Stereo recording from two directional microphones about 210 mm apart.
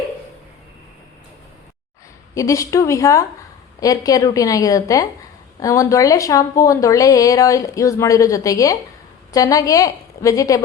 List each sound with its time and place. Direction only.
2.3 s a woman's voice: 15° left (ahead or behind)